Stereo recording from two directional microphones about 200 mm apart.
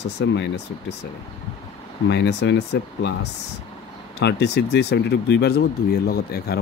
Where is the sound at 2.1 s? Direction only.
60° left (ahead or behind).